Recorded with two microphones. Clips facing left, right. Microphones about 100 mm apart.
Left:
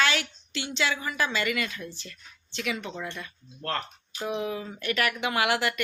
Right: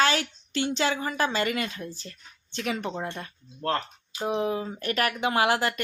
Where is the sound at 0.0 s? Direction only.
40° right (ahead or behind).